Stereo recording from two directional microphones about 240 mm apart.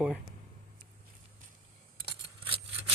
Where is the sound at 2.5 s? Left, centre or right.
Right.